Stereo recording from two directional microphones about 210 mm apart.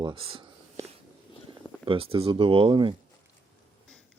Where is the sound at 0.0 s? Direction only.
25° right (ahead or behind).